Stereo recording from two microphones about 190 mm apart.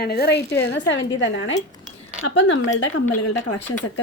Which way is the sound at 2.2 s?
85° left.